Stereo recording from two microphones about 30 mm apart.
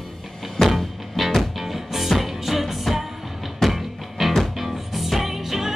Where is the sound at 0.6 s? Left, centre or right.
Centre.